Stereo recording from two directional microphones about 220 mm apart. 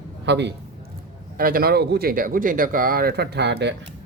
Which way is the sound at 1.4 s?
40° right (ahead or behind).